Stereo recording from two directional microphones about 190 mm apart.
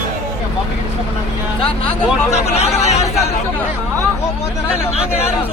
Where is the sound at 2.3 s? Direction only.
35° left (ahead or behind).